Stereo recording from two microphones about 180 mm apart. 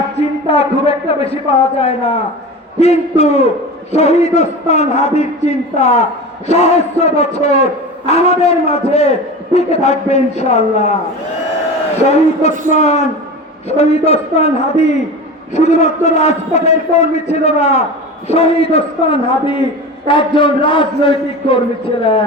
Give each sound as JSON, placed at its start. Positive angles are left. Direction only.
{"t": 0.2, "sound": "a man's voice", "side_deg": 35}
{"t": 12.7, "sound": "a man's voice", "side_deg": 40}